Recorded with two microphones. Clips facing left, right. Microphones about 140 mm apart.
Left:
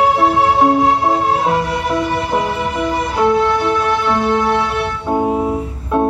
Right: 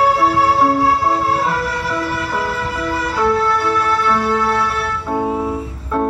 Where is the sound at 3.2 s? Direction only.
20° left (ahead or behind).